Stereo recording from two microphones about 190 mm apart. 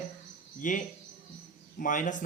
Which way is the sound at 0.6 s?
45° left (ahead or behind).